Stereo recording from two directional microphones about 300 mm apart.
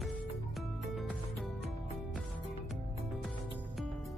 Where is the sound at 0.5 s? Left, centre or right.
Centre.